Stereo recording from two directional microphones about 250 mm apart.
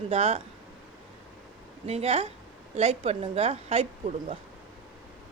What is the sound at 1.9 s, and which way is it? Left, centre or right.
Speech, right.